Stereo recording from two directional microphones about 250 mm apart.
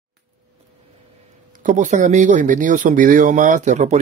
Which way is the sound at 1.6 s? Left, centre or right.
Right.